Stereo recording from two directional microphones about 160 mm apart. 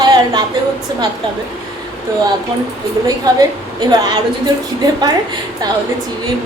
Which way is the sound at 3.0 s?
25° right (ahead or behind).